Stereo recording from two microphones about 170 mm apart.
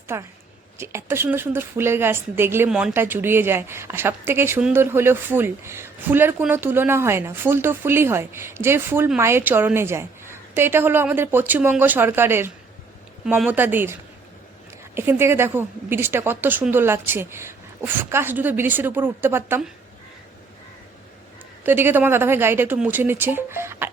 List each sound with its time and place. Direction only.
0.1 s a woman's voice: 15° right (ahead or behind)
14.9 s a woman's voice: 15° right (ahead or behind)
21.6 s a woman's voice: 10° right (ahead or behind)